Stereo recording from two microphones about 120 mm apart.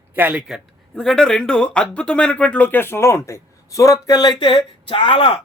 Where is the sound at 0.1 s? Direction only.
15° right (ahead or behind).